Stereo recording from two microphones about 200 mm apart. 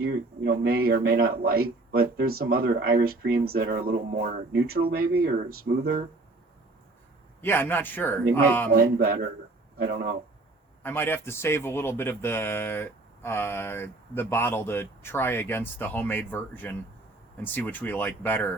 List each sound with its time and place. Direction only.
0.0 s speech: 50° right (ahead or behind)
7.4 s speech: 10° left (ahead or behind)
8.7 s speech: 45° right (ahead or behind)
10.8 s speech: 10° left (ahead or behind)